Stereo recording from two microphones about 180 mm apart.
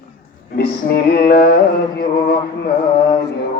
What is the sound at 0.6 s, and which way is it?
Mantra, 60° left (ahead or behind).